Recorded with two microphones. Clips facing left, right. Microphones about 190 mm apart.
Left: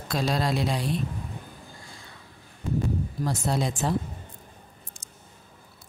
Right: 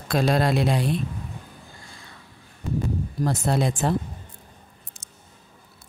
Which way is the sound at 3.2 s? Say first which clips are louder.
Right 4 dB; 60° right (ahead or behind).